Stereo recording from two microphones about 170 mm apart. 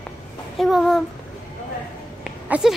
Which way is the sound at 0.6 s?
Centre (ahead or behind).